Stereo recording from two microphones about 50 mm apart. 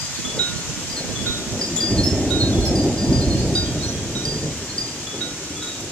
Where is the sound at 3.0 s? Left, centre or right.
Centre.